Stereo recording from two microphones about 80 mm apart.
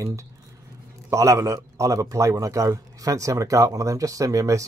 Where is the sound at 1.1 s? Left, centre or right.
Right.